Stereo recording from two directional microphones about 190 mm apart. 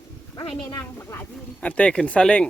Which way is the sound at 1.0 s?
10° left (ahead or behind).